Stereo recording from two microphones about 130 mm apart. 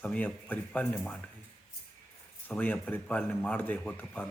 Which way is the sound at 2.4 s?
15° left (ahead or behind).